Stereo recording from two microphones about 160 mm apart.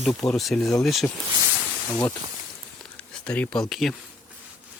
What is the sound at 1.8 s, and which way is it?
Speech, 15° left (ahead or behind).